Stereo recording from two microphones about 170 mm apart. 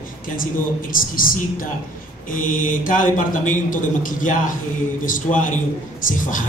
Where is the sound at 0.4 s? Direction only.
55° left (ahead or behind).